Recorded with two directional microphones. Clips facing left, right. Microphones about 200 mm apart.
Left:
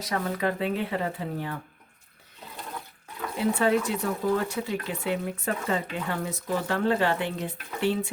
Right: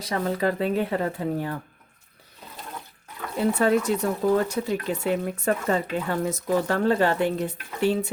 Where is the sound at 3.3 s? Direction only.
45° right (ahead or behind).